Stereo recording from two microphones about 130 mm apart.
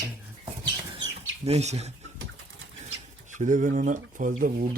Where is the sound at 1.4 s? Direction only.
55° right (ahead or behind).